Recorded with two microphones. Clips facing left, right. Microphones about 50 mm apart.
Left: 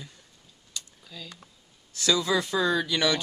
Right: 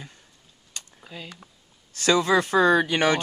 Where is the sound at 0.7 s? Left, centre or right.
Right.